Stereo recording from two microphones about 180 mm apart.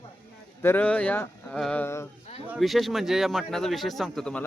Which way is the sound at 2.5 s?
Centre (ahead or behind).